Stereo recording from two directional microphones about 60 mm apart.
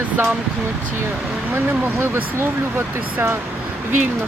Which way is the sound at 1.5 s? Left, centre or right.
Right.